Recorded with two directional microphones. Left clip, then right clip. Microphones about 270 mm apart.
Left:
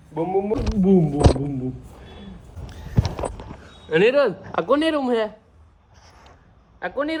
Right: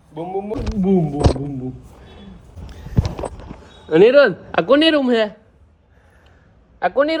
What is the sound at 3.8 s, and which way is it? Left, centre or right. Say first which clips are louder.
Speech: right 6 dB; centre.